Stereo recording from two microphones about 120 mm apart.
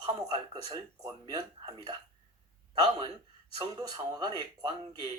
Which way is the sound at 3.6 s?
30° right (ahead or behind).